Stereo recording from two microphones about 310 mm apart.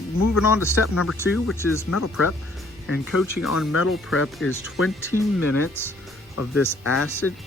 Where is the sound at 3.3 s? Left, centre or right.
Left.